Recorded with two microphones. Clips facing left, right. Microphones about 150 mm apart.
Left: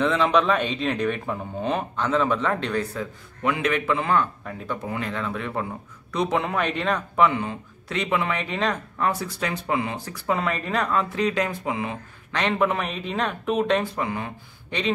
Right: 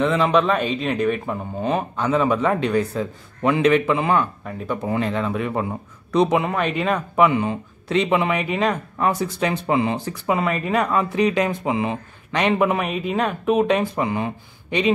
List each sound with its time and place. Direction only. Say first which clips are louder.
0.0 s speech: right 2 dB; centre (ahead or behind)
2.9 s speech: right 5 dB; 25° right (ahead or behind)
4.8 s speech: right 8 dB; 25° right (ahead or behind)
6.4 s speech: right 3 dB; 5° right (ahead or behind)
8.9 s speech: right 4 dB; 20° right (ahead or behind)
10.2 s speech: right 3 dB; 5° right (ahead or behind)